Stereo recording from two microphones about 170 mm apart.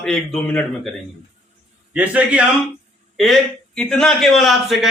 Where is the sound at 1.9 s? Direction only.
10° right (ahead or behind).